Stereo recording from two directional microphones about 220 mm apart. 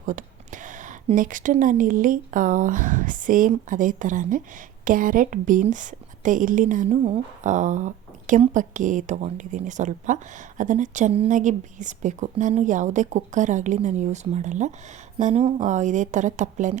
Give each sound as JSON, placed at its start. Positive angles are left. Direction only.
{"t": 0.0, "sound": "speech", "side_deg": -35}